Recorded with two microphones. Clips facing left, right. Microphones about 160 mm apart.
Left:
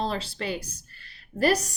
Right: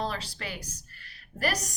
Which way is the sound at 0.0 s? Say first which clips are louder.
Left 4 dB; 25° left (ahead or behind).